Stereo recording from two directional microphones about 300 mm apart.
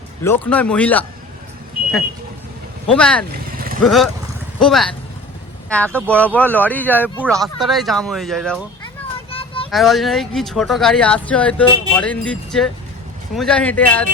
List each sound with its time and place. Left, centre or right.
0.2 s speech: centre
2.8 s speech: centre
3.3 s vehicle: right
3.8 s speech: centre
9.3 s child singing: centre
9.6 s speech: centre